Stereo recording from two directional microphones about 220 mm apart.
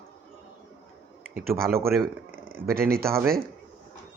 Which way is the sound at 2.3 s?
10° right (ahead or behind).